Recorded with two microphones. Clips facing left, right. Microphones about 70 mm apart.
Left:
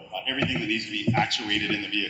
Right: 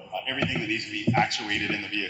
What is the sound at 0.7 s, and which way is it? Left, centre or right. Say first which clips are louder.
A man's voice: right 2 dB; right.